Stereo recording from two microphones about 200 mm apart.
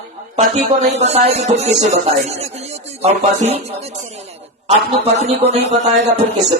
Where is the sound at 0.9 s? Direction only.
30° right (ahead or behind).